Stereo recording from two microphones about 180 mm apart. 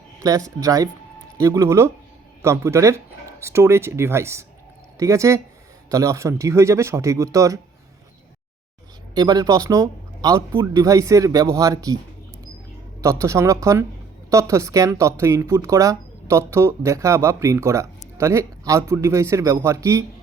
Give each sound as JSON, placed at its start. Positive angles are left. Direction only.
{"t": 0.2, "sound": "a man's voice", "side_deg": -20}
{"t": 9.1, "sound": "a man's voice", "side_deg": -20}
{"t": 13.0, "sound": "speech", "side_deg": -15}